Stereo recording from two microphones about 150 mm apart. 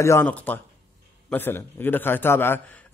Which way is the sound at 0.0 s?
15° left (ahead or behind).